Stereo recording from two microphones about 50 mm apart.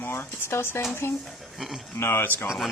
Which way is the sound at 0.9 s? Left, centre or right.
Left.